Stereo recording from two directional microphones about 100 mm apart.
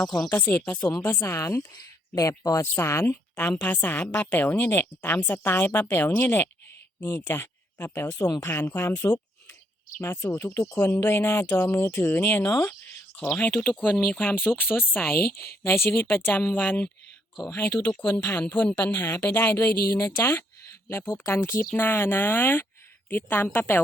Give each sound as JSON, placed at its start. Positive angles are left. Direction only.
{"t": 0.3, "sound": "a woman's voice", "side_deg": 20}
{"t": 1.4, "sound": "a woman's voice", "side_deg": 30}
{"t": 13.3, "sound": "a woman's voice", "side_deg": 15}
{"t": 18.8, "sound": "a woman's voice", "side_deg": 30}